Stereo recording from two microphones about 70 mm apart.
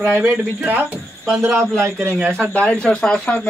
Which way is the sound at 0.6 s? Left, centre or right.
Right.